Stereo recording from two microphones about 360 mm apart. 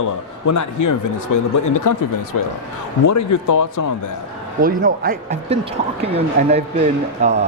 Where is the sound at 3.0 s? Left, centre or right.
Left.